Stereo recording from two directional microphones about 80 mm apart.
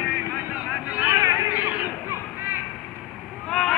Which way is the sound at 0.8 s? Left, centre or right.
Centre.